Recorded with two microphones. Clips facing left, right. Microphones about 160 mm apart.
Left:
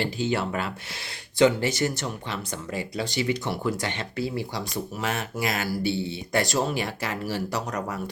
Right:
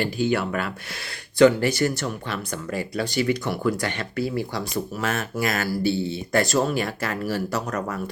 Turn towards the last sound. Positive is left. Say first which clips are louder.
# right 2 dB
turn(degrees=20)  # may be behind; listen again after turning